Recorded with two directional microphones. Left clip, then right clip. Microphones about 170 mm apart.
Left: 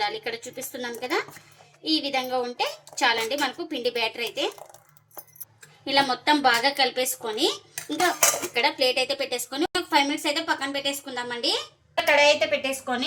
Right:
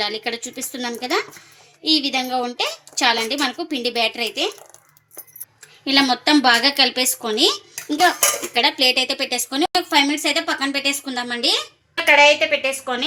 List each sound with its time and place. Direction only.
0.0 s a woman's voice: 50° right (ahead or behind)
5.8 s a woman's voice: 55° right (ahead or behind)
12.0 s a woman's voice: 35° right (ahead or behind)